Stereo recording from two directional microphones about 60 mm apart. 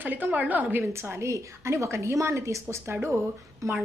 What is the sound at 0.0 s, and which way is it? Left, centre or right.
A woman's voice, right.